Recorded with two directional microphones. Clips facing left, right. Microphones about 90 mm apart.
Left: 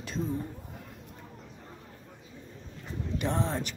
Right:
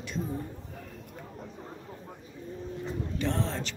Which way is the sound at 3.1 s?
15° left (ahead or behind).